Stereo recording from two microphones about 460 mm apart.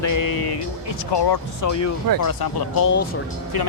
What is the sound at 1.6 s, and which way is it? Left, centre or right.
Speech, left.